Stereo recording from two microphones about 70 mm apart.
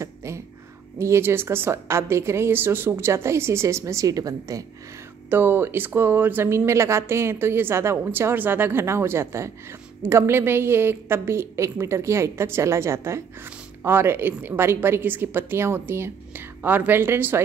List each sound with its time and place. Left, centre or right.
0.0 s a sound: right
0.9 s speech: right
5.3 s speech: right